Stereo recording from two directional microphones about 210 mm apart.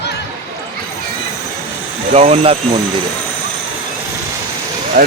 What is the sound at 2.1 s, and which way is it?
Speech, 30° right (ahead or behind).